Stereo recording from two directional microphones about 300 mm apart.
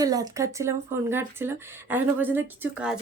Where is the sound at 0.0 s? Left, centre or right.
Centre.